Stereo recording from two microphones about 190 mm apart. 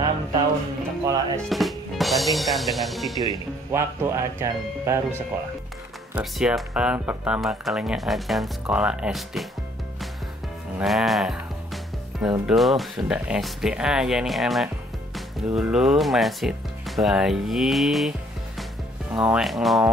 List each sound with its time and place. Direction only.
1.0 s speech: 15° right (ahead or behind)
1.4 s speech: centre (ahead or behind)
3.2 s speech: 20° right (ahead or behind)
6.1 s speech: centre (ahead or behind)
10.8 s speech: centre (ahead or behind)
19.1 s speech: 5° right (ahead or behind)